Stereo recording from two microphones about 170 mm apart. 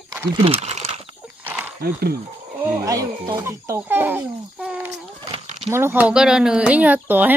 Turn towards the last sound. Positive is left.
turn(degrees=-10)  # may be behind; listen again after turning